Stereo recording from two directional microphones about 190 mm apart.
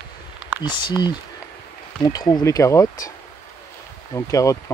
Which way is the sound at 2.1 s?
20° left (ahead or behind).